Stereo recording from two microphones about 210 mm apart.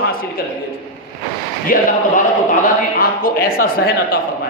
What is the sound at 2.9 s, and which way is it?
Speech, 45° left (ahead or behind).